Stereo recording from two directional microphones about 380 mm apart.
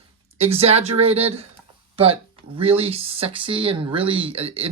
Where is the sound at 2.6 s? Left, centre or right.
Centre.